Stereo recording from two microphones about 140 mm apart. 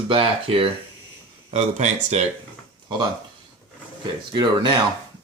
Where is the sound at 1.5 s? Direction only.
55° right (ahead or behind).